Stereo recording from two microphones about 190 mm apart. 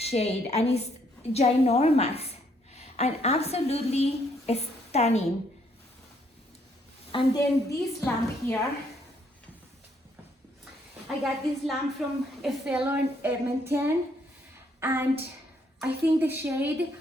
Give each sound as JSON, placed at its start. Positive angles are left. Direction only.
{"t": 0.0, "sound": "a woman's voice", "side_deg": 35}
{"t": 7.1, "sound": "a woman's voice", "side_deg": 25}
{"t": 11.2, "sound": "a woman's voice", "side_deg": 0}